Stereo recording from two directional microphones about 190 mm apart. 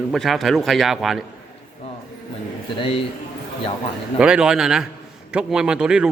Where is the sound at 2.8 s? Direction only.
30° left (ahead or behind).